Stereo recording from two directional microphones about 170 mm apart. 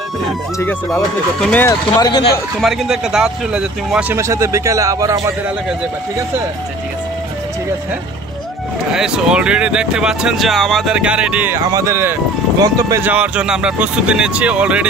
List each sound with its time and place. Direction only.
1.4 s speech: 10° left (ahead or behind)
1.7 s speech: 25° left (ahead or behind)
2.6 s speech: centre (ahead or behind)
4.2 s speech: 15° right (ahead or behind)
8.9 s speech: 5° right (ahead or behind)
13.1 s speech: 5° right (ahead or behind)